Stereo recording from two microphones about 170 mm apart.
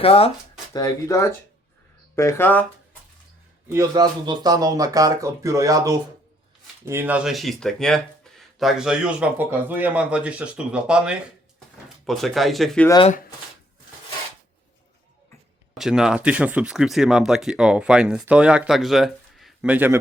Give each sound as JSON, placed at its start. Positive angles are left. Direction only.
{"t": 0.0, "sound": "speech", "side_deg": 35}
{"t": 0.7, "sound": "speech", "side_deg": 20}
{"t": 3.7, "sound": "speech", "side_deg": -20}
{"t": 15.8, "sound": "speech", "side_deg": -5}